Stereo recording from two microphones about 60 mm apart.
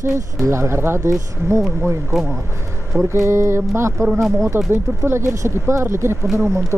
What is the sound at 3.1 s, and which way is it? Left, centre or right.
Speech, right.